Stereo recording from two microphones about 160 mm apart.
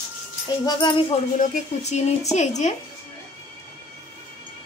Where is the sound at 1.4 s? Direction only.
45° left (ahead or behind).